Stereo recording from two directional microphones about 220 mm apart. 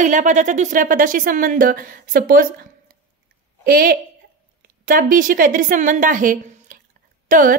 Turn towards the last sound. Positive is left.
turn(degrees=-35)  # may be behind; listen again after turning